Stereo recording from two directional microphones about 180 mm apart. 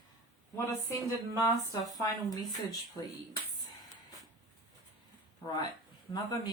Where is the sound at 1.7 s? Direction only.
20° left (ahead or behind).